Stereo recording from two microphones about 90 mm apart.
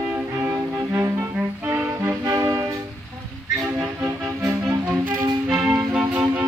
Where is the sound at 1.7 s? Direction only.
30° right (ahead or behind).